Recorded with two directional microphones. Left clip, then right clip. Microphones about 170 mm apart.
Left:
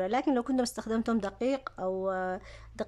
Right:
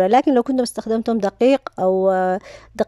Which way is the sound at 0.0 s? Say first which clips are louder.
Right 14 dB; 40° right (ahead or behind).